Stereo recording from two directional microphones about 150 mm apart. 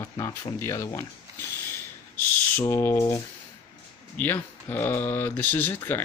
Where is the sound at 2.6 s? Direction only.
20° left (ahead or behind).